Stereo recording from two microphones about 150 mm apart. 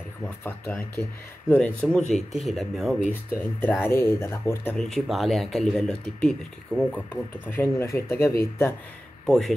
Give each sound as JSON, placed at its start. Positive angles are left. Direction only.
{"t": 0.4, "sound": "speech", "side_deg": 15}
{"t": 3.3, "sound": "speech", "side_deg": 15}
{"t": 4.7, "sound": "speech", "side_deg": 5}
{"t": 7.4, "sound": "speech", "side_deg": 15}
{"t": 9.2, "sound": "speech", "side_deg": 0}